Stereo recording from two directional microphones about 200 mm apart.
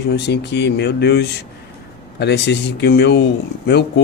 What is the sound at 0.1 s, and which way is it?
Speech, 60° left (ahead or behind).